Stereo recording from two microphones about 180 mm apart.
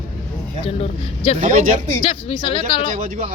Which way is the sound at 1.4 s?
45° right (ahead or behind).